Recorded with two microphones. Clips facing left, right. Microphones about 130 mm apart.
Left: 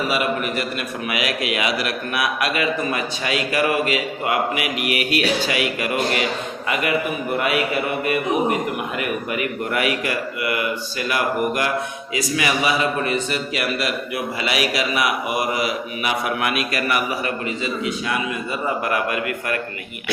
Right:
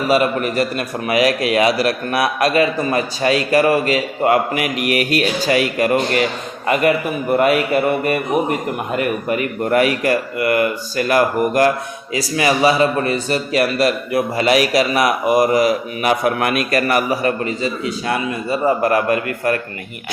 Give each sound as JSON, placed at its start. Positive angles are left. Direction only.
{"t": 0.1, "sound": "a man's voice", "side_deg": -40}
{"t": 7.3, "sound": "a sound", "side_deg": -45}
{"t": 9.0, "sound": "a man's voice", "side_deg": -40}